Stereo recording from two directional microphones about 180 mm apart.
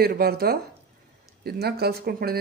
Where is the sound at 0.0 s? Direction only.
60° right (ahead or behind).